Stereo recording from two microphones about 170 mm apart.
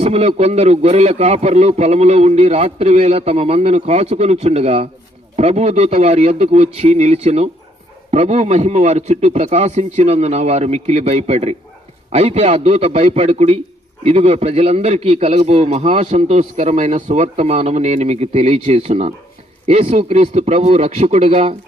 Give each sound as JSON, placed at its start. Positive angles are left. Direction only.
{"t": 0.0, "sound": "a man's voice", "side_deg": -35}